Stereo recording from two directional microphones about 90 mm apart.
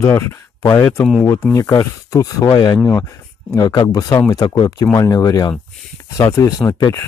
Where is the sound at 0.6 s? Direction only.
45° left (ahead or behind).